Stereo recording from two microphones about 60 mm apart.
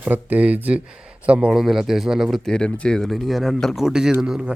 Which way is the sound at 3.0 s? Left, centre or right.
Centre.